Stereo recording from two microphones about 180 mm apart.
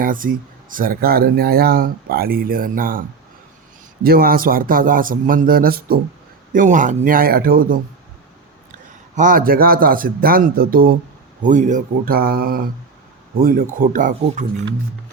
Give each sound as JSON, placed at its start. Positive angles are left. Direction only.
{"t": 0.0, "sound": "speech", "side_deg": -50}
{"t": 4.0, "sound": "speech", "side_deg": -55}
{"t": 9.1, "sound": "speech", "side_deg": -50}
{"t": 11.4, "sound": "speech", "side_deg": -45}